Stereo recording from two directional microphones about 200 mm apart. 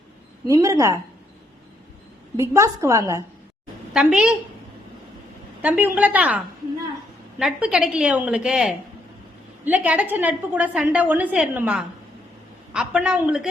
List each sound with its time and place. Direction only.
0.4 s a woman's voice: 15° right (ahead or behind)
2.3 s a woman's voice: 15° right (ahead or behind)
3.9 s a woman's voice: 5° right (ahead or behind)
5.6 s a woman's voice: 10° right (ahead or behind)